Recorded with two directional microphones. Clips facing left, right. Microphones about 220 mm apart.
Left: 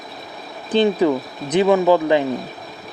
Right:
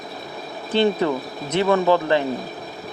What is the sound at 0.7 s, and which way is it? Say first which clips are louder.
Speech: left 3 dB; 15° left (ahead or behind).